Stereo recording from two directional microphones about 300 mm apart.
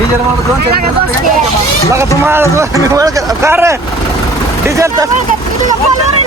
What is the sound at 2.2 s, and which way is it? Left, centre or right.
Speech, centre.